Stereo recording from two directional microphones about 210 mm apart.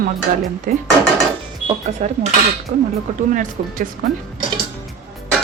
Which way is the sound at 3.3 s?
40° right (ahead or behind).